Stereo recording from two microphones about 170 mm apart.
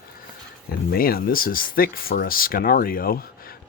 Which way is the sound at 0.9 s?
60° left (ahead or behind).